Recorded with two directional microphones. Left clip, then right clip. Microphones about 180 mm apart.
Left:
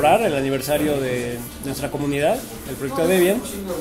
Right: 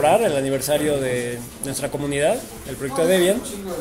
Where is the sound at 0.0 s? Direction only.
15° right (ahead or behind).